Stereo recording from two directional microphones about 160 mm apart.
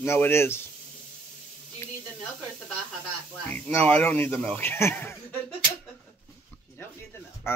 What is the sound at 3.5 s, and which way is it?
Speech, 10° left (ahead or behind).